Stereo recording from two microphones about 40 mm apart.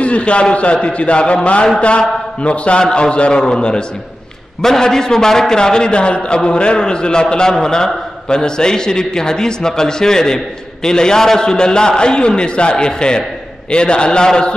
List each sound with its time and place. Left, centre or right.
0.0 s a man's voice: left